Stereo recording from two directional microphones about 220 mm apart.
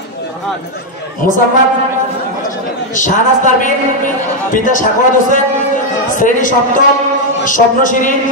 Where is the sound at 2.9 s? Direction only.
35° left (ahead or behind).